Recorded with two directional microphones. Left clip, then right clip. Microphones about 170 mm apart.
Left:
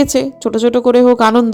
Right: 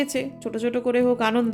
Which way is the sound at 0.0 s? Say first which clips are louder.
Left 12 dB; 40° left (ahead or behind).